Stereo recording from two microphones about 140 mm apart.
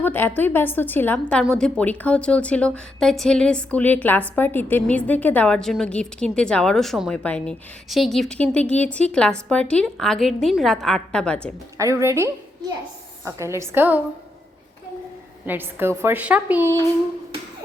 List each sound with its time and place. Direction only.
0.0 s a woman's voice: 15° left (ahead or behind)
11.8 s a woman's voice: 20° right (ahead or behind)
15.4 s a woman's voice: 15° right (ahead or behind)